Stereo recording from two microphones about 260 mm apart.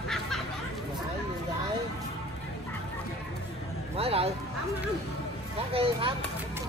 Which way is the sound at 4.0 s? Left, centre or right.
Right.